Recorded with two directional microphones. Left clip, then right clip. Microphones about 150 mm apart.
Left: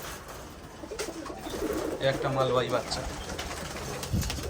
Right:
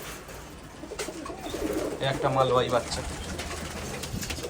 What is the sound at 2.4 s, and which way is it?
Speech, 25° right (ahead or behind).